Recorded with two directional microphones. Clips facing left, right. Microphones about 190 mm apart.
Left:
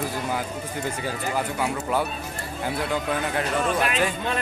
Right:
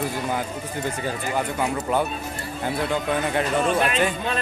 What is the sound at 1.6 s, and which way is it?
Speech, 5° left (ahead or behind).